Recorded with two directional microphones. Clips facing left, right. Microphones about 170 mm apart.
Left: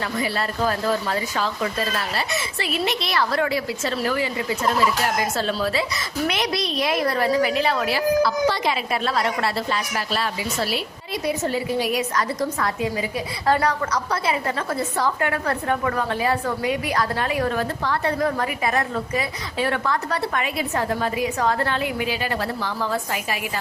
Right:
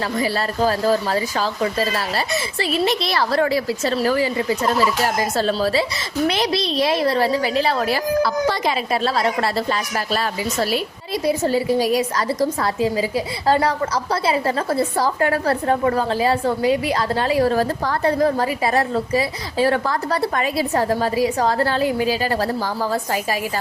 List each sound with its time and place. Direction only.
0.2 s a woman's voice: 35° right (ahead or behind)
5.4 s a woman's voice: 35° right (ahead or behind)